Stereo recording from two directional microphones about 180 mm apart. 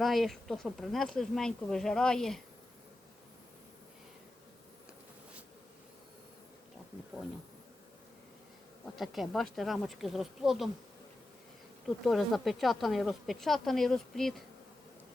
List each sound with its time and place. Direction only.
0.0 s speech: centre (ahead or behind)
9.0 s speech: centre (ahead or behind)
12.0 s speech: centre (ahead or behind)